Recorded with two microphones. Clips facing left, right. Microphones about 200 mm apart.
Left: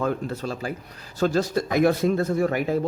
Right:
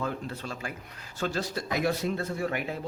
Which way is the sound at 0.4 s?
35° left (ahead or behind).